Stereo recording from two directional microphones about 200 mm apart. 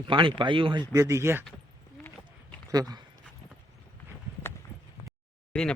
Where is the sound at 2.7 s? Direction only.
20° right (ahead or behind).